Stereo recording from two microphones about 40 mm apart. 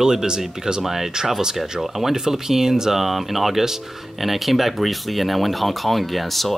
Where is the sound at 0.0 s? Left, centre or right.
Centre.